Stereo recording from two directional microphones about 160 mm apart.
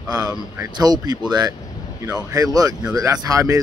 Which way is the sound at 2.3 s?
20° right (ahead or behind).